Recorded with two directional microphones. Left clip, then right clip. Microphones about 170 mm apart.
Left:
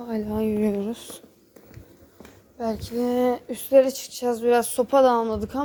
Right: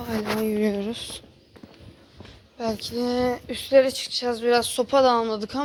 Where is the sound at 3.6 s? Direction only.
30° left (ahead or behind).